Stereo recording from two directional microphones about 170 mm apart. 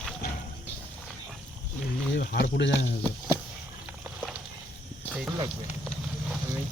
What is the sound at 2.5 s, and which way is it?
Speech, 90° left.